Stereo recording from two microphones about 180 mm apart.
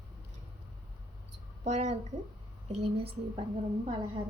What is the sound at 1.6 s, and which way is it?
A woman's voice, 40° right (ahead or behind).